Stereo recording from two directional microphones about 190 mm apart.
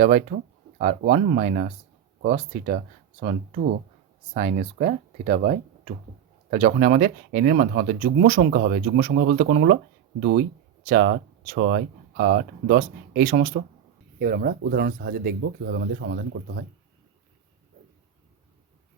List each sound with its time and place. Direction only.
0.0 s speech: 40° right (ahead or behind)
15.4 s speech: 65° right (ahead or behind)